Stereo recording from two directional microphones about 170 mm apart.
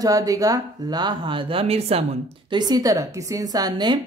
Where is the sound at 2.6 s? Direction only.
20° right (ahead or behind).